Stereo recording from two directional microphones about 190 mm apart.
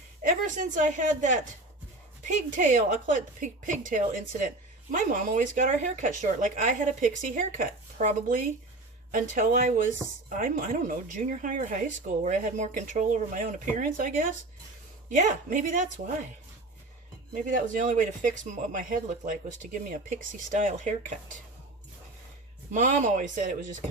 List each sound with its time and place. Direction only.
0.2 s a woman's voice: 40° right (ahead or behind)
17.3 s speech: 45° right (ahead or behind)
22.7 s speech: 40° right (ahead or behind)